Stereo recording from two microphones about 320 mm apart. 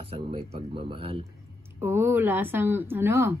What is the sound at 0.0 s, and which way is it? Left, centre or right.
Speech, centre.